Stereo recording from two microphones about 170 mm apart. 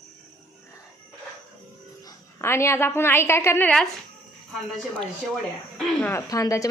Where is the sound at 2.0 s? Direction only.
15° left (ahead or behind).